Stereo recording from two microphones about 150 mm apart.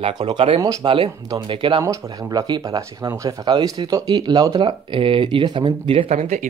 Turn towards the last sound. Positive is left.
turn(degrees=-50)  # may be behind; listen again after turning